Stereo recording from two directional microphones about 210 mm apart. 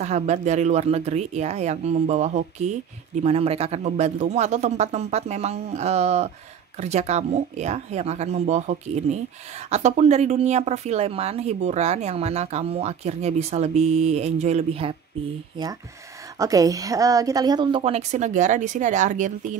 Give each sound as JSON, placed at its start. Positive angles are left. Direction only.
{"t": 0.0, "sound": "a woman's voice", "side_deg": -35}